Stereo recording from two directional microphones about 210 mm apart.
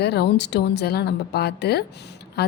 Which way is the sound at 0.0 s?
50° left (ahead or behind).